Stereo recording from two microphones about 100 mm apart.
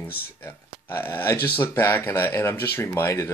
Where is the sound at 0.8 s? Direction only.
20° left (ahead or behind).